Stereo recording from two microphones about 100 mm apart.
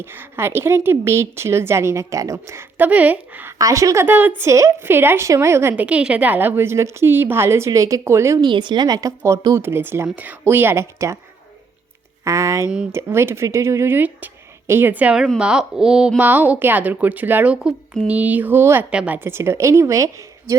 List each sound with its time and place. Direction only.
0.0 s speech: 25° right (ahead or behind)
3.6 s a woman's voice: 35° right (ahead or behind)
4.0 s speech: 20° right (ahead or behind)
5.7 s speech: 15° right (ahead or behind)
8.4 s a woman's voice: 50° right (ahead or behind); by 9.4 s 35° right (ahead or behind)
9.6 s speech: 20° right (ahead or behind)
12.2 s speech: 30° right (ahead or behind)